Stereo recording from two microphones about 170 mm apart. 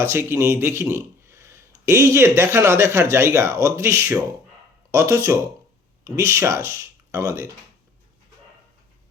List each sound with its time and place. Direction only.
0.0 s speech: 15° right (ahead or behind)